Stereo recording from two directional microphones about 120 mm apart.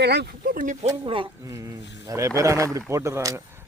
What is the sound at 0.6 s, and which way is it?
Speech, 90° right.